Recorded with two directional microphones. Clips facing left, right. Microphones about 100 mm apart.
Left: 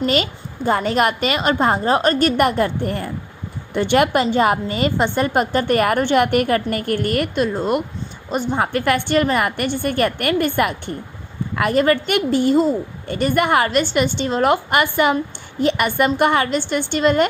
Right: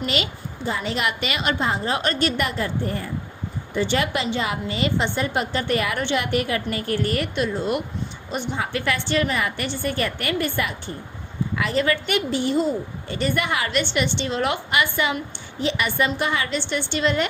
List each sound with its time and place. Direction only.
0.0 s a woman's voice: 45° left (ahead or behind)